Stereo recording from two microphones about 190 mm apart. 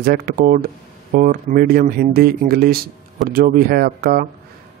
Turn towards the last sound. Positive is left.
turn(degrees=-50)  # may be behind; listen again after turning